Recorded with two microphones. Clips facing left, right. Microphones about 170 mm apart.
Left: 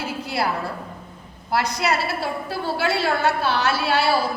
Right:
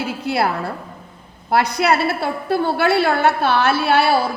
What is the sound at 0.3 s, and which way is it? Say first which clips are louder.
A woman's voice: right 5 dB; 60° right (ahead or behind).